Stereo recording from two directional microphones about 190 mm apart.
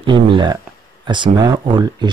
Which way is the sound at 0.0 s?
25° right (ahead or behind).